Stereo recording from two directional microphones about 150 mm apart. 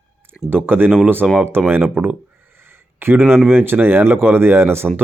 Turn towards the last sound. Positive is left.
turn(degrees=-15)  # may be behind; listen again after turning